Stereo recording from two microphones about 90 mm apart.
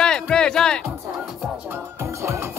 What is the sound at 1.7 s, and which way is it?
Music, 30° right (ahead or behind).